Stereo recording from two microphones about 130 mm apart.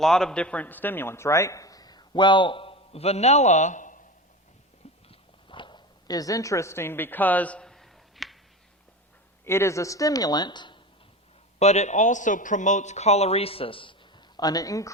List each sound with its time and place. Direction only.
0.0 s a man's voice: 5° left (ahead or behind); by 4.0 s 75° left (ahead or behind)
5.0 s a sound: 40° left (ahead or behind); by 8.4 s centre (ahead or behind)
9.5 s speech: 20° left (ahead or behind)
11.6 s a man's voice: 60° left (ahead or behind); by 13.9 s 45° left (ahead or behind)
14.3 s speech: 30° left (ahead or behind)